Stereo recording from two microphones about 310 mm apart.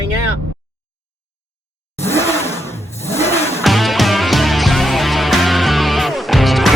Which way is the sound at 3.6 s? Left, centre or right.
Centre.